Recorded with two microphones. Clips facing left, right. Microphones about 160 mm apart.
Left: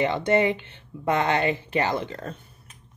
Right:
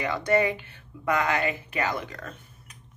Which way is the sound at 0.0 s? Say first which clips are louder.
Left 3 dB; 25° left (ahead or behind).